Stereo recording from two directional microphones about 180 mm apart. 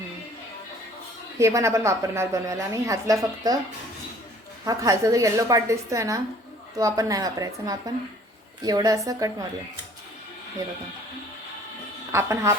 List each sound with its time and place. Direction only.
1.4 s a woman's voice: 15° right (ahead or behind)
4.6 s a woman's voice: 20° right (ahead or behind)
12.1 s a woman's voice: 15° right (ahead or behind)